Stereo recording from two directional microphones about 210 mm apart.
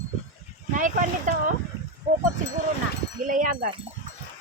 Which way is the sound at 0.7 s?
40° right (ahead or behind).